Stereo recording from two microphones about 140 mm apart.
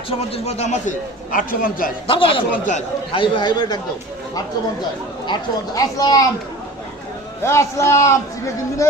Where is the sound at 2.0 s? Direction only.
40° left (ahead or behind).